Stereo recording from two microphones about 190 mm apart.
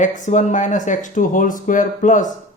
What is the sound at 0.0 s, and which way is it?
Speech, 40° left (ahead or behind).